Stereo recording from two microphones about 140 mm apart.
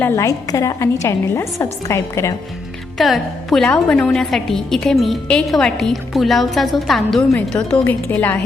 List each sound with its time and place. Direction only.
0.0 s a woman's voice: 20° left (ahead or behind)
3.0 s a woman's voice: centre (ahead or behind)